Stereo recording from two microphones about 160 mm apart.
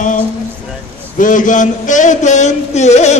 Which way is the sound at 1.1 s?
55° left (ahead or behind).